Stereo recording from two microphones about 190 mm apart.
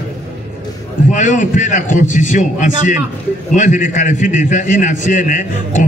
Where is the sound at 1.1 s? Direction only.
40° left (ahead or behind).